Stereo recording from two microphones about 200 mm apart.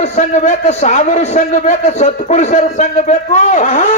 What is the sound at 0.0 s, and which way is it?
A man's voice, 35° left (ahead or behind).